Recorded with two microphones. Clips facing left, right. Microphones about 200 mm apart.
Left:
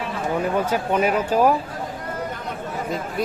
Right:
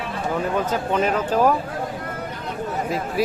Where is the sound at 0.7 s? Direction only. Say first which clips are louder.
Left 1 dB; 10° left (ahead or behind).